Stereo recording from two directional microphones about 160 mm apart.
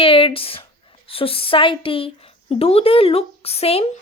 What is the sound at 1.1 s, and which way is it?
Speech, 35° left (ahead or behind).